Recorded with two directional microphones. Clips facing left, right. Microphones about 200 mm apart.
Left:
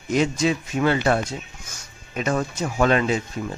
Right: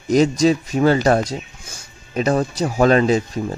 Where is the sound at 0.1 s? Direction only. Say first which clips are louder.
Right 6 dB; 40° right (ahead or behind).